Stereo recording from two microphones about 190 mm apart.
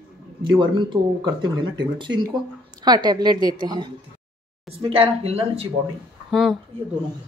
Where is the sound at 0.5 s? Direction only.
25° right (ahead or behind).